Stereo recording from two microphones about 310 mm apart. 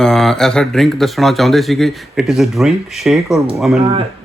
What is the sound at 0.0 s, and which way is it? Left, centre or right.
Speech, centre.